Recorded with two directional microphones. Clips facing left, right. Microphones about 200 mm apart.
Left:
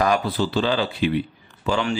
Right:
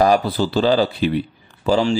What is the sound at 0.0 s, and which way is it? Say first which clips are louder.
Speech: right 5 dB; 35° right (ahead or behind).